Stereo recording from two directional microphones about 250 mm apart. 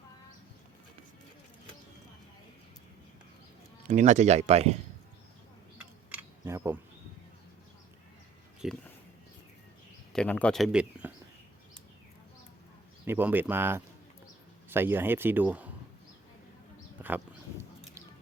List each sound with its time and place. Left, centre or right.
3.8 s speech: right
5.7 s camera: centre
8.6 s speech: centre
10.1 s speech: centre
13.1 s speech: centre
17.0 s a sound: centre